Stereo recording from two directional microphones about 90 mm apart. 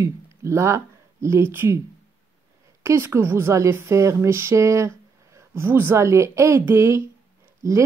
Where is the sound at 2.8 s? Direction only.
30° right (ahead or behind).